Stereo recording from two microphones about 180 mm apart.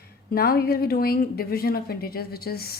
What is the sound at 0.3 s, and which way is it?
A woman's voice, 55° left (ahead or behind).